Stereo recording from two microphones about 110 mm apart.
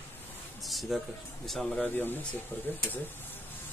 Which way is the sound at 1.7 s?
15° left (ahead or behind).